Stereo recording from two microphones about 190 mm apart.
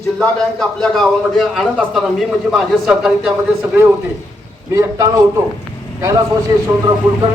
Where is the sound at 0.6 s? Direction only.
Centre (ahead or behind).